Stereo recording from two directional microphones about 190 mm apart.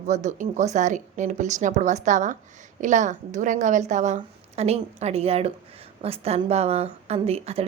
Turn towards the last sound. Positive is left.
turn(degrees=-30)  # may be behind; listen again after turning